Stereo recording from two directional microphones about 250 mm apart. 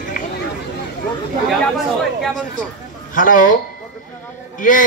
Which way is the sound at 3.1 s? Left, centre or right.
Left.